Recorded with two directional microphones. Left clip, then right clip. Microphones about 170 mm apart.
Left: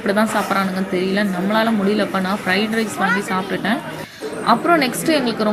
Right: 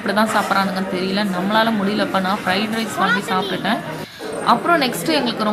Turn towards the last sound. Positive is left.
turn(degrees=15)  # may be behind; listen again after turning